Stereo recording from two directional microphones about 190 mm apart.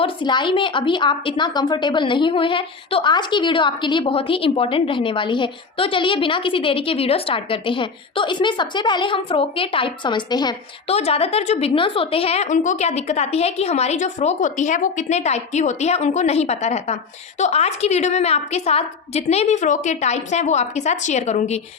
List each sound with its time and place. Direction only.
0.0 s a woman's voice: 25° left (ahead or behind)
10.9 s a woman's voice: 30° left (ahead or behind)